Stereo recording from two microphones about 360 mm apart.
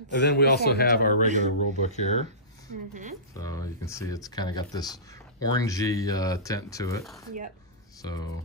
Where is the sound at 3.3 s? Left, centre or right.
Centre.